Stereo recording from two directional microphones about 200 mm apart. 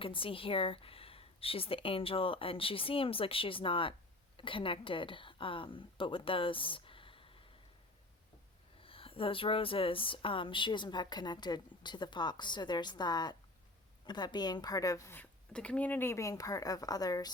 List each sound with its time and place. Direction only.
0.0 s a woman's voice: 25° left (ahead or behind)
8.8 s a woman's voice: 25° left (ahead or behind)